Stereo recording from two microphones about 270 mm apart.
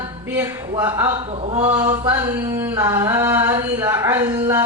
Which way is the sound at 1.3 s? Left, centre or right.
Right.